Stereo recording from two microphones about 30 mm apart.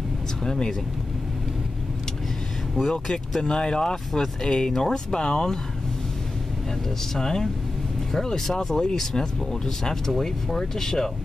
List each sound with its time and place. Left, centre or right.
0.5 s speech: centre
2.8 s speech: centre
4.1 s speech: centre
4.5 s speech: left
7.2 s speech: left